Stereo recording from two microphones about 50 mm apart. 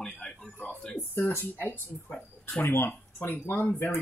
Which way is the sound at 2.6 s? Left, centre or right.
Left.